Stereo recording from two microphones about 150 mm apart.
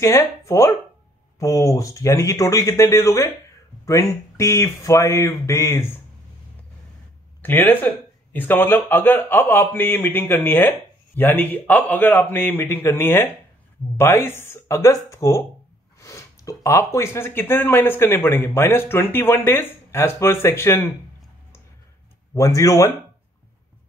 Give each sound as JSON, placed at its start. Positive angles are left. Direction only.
{"t": 0.0, "sound": "speech", "side_deg": 20}
{"t": 7.4, "sound": "speech", "side_deg": 10}
{"t": 22.3, "sound": "speech", "side_deg": 20}